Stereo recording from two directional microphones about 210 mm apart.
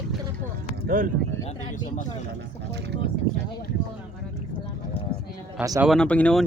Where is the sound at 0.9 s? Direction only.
40° right (ahead or behind).